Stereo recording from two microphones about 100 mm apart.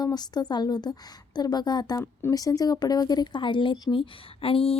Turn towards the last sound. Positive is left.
turn(degrees=65)  # may be behind; listen again after turning